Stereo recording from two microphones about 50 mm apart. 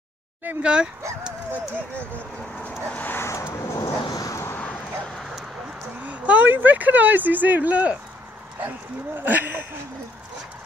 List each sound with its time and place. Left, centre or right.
0.6 s speech: centre
2.6 s vehicle: left
3.3 s vehicle: left
4.6 s bow-wow: left
5.0 s dog: centre
6.0 s speech: right
9.2 s speech: right